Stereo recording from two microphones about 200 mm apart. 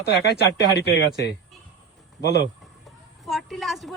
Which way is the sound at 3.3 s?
Centre (ahead or behind).